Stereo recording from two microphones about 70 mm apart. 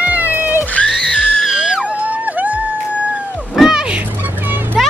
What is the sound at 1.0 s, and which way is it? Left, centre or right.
Music, centre.